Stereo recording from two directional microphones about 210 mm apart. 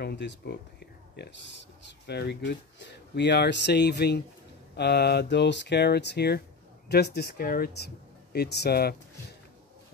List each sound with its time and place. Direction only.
0.0 s speech: 55° left (ahead or behind)